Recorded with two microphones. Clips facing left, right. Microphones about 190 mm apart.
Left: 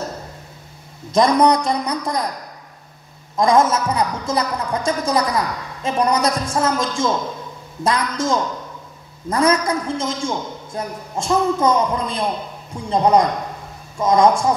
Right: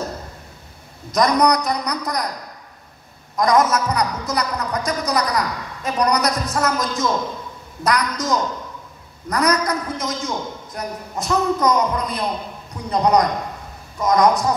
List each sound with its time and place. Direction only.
1.1 s a man's voice: 25° left (ahead or behind)
3.3 s a man's voice: 25° left (ahead or behind)